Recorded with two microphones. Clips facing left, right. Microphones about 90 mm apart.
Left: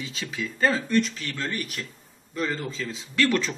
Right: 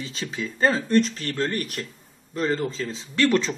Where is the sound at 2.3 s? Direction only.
35° right (ahead or behind).